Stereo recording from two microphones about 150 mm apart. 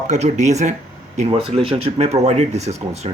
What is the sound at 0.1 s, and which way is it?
Speech, 50° right (ahead or behind).